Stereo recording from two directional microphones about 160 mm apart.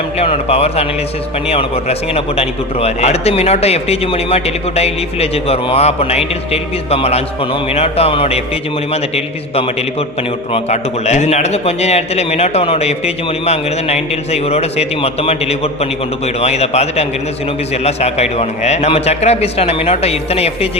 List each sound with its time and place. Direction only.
0.2 s a man's voice: 40° left (ahead or behind)